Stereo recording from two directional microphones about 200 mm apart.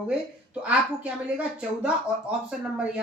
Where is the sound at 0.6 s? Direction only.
5° right (ahead or behind).